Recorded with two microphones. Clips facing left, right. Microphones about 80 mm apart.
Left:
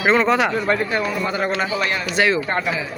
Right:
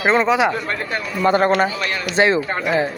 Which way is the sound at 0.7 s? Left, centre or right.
Centre.